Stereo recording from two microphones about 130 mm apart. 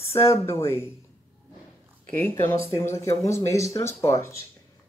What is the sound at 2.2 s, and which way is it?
Speech, 20° left (ahead or behind).